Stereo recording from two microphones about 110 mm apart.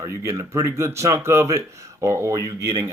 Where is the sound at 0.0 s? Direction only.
25° right (ahead or behind).